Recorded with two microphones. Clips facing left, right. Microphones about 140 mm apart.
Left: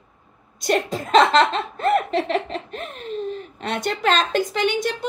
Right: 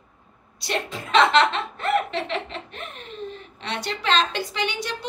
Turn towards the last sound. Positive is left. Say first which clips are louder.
# left 6 dB
turn(degrees=45)  # may be behind; listen again after turning